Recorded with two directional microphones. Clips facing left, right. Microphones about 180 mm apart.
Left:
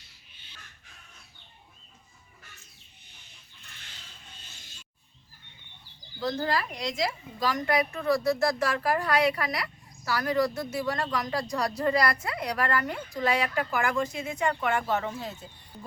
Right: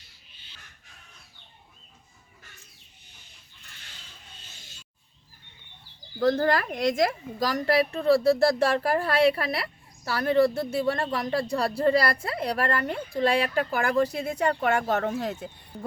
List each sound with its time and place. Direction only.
6.1 s a woman's voice: 55° right (ahead or behind)